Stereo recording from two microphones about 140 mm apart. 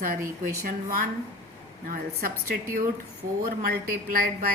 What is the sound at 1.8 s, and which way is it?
A woman's voice, 80° right.